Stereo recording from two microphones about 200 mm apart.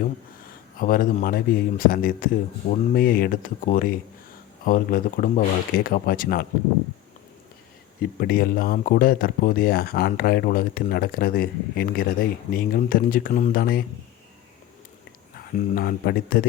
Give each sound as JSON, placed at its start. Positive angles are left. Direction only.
{"t": 0.8, "sound": "speech", "side_deg": 45}
{"t": 8.2, "sound": "speech", "side_deg": 45}
{"t": 15.4, "sound": "speech", "side_deg": 45}